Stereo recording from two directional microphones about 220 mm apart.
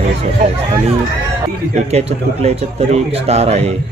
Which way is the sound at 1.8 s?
30° right (ahead or behind).